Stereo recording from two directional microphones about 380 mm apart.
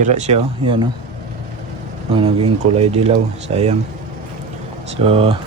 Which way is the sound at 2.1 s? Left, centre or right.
Centre.